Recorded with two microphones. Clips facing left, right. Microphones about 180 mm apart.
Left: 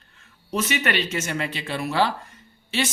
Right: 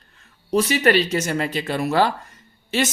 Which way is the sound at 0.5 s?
35° right (ahead or behind).